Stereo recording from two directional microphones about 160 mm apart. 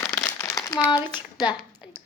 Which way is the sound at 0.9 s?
30° left (ahead or behind).